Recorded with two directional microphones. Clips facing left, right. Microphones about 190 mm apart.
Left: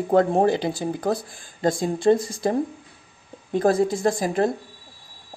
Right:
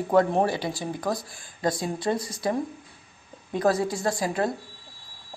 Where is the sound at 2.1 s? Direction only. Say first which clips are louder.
Left 5 dB; 50° left (ahead or behind).